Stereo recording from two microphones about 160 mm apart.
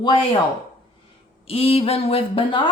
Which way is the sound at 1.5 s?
40° left (ahead or behind).